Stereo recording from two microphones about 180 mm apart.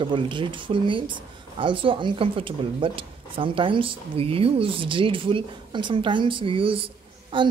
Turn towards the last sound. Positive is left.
turn(degrees=-30)  # may be behind; listen again after turning